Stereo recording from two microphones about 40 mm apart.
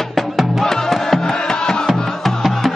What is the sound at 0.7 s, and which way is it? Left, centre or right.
Music, centre.